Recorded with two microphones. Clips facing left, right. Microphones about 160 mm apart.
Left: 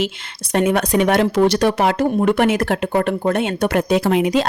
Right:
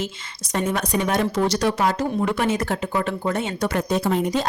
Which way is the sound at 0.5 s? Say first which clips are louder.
Left 7 dB; 65° left (ahead or behind).